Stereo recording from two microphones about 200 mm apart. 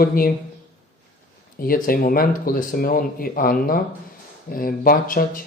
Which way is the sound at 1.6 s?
45° left (ahead or behind).